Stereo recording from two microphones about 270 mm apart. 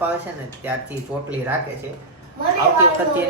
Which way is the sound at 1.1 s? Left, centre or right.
Centre.